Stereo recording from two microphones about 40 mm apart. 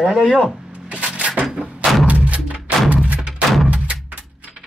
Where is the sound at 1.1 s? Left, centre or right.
Right.